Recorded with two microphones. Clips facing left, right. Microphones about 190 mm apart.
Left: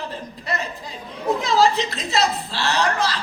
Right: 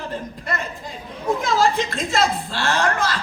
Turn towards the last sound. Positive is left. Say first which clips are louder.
# even
turn(degrees=-50)  # may be behind; listen again after turning